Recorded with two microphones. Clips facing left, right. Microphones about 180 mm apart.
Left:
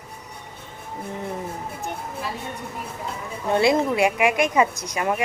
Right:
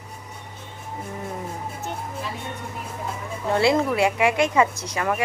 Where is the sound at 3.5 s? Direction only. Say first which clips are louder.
Left 1 dB; 20° left (ahead or behind).